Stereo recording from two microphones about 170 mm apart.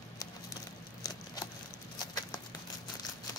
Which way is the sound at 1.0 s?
20° left (ahead or behind).